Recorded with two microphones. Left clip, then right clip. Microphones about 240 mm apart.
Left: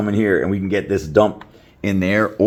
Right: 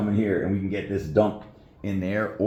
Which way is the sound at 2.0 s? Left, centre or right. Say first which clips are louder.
Left 9 dB; left.